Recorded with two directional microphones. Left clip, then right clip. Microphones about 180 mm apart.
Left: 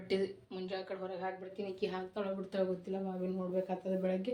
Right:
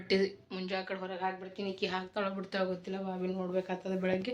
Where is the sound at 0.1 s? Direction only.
10° right (ahead or behind).